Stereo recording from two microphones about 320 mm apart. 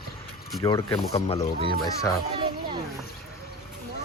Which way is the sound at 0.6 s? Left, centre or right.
Centre.